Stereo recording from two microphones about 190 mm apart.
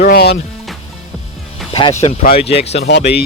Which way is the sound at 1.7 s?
30° left (ahead or behind).